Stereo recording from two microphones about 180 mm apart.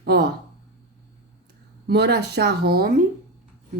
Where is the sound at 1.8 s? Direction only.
65° right (ahead or behind).